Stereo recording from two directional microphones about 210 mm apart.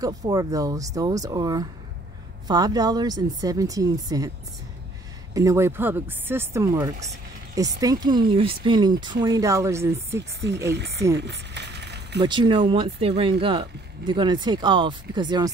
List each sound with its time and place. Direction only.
0.0 s speech: 15° right (ahead or behind)
5.3 s speech: 15° right (ahead or behind)
10.7 s speech: 55° right (ahead or behind)
11.1 s a sound: 55° right (ahead or behind)
12.2 s speech: 20° right (ahead or behind)